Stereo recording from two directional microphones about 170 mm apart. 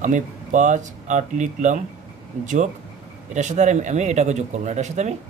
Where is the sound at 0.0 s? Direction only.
45° right (ahead or behind).